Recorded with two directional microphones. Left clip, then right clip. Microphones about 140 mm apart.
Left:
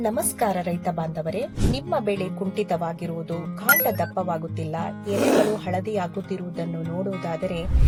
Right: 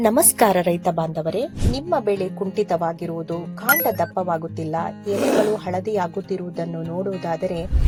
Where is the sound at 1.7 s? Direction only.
15° right (ahead or behind).